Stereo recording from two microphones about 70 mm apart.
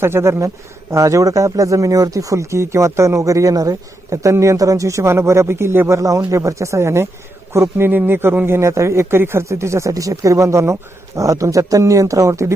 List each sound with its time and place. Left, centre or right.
0.0 s a man's voice: right
6.0 s a man's voice: right